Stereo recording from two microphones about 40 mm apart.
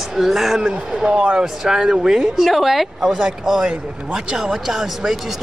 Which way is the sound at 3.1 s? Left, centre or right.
Right.